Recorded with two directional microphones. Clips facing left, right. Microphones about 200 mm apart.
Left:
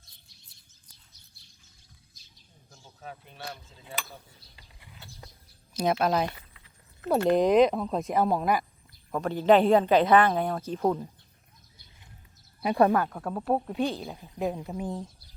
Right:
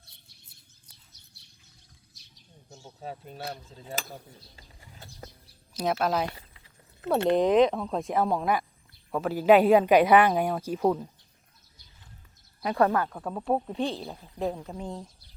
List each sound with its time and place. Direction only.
2.6 s speech: 30° right (ahead or behind)
5.7 s speech: centre (ahead or behind)
7.3 s speech: centre (ahead or behind)
12.6 s speech: 15° left (ahead or behind)
13.1 s speech: centre (ahead or behind)
14.1 s speech: 15° left (ahead or behind)